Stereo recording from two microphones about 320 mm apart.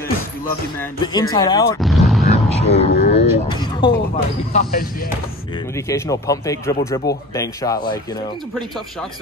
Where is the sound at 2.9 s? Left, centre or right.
Left.